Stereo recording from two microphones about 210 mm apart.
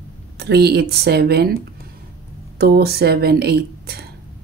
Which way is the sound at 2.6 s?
50° right (ahead or behind).